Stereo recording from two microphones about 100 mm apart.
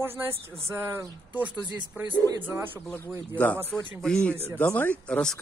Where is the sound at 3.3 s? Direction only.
15° left (ahead or behind).